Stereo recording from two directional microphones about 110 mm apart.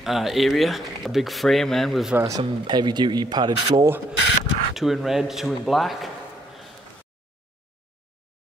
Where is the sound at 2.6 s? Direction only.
40° right (ahead or behind).